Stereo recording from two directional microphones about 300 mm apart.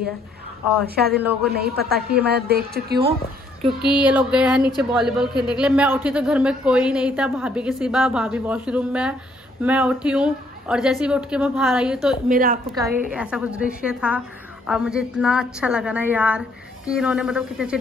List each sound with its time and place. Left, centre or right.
0.9 s a woman's voice: right
3.8 s a man's voice: centre
12.3 s a woman's voice: right
13.1 s a man's voice: centre